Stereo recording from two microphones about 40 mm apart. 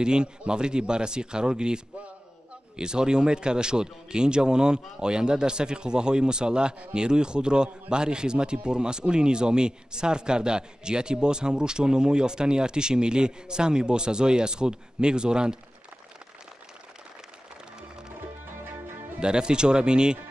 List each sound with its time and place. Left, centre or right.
0.0 s speech: right
19.1 s speech: right